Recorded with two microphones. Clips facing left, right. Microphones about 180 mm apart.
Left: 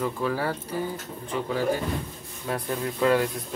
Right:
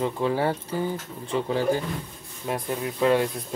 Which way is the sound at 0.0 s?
25° right (ahead or behind).